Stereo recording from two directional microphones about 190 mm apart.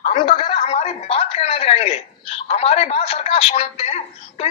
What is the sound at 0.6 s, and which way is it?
A woman's voice, 35° left (ahead or behind).